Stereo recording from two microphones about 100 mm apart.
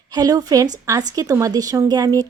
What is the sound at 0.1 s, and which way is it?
A woman's voice, 40° right (ahead or behind).